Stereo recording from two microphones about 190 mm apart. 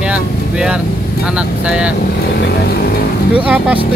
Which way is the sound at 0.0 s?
5° right (ahead or behind).